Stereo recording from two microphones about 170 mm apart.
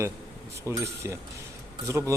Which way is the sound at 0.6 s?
15° right (ahead or behind).